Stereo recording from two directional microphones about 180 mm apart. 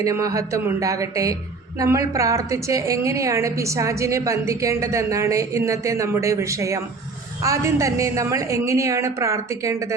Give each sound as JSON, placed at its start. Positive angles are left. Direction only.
{"t": 0.0, "sound": "a woman's voice", "side_deg": -20}